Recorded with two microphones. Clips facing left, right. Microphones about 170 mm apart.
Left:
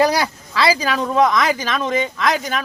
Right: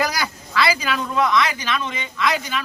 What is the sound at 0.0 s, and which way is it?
Speech, 30° left (ahead or behind).